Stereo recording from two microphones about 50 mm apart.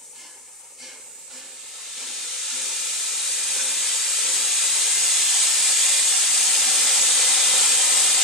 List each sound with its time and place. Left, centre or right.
2.0 s steam: centre